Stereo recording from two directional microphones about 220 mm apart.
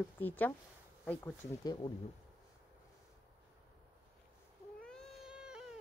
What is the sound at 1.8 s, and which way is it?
Speech, 20° left (ahead or behind).